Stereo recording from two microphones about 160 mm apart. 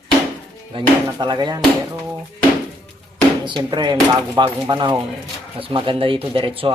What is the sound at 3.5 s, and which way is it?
Speech, 30° right (ahead or behind).